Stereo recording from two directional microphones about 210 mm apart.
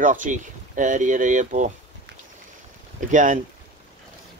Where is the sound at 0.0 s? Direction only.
40° right (ahead or behind).